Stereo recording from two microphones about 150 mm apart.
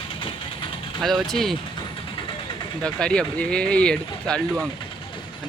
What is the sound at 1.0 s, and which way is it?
Speech, centre (ahead or behind).